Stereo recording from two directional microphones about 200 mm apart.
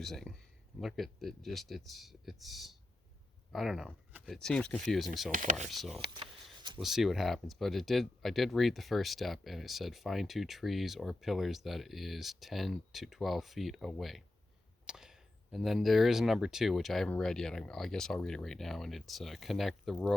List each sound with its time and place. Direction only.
0.0 s speech: centre (ahead or behind)
5.3 s speech: 40° right (ahead or behind)
5.6 s speech: centre (ahead or behind)